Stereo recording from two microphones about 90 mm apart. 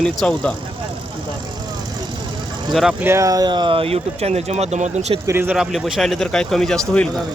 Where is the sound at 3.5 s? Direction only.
60° right (ahead or behind); by 3.9 s 80° right.